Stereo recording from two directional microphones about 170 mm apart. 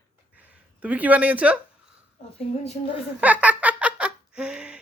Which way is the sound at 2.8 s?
40° left (ahead or behind).